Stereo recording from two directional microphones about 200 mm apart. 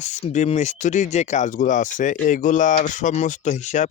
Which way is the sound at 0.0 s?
35° left (ahead or behind).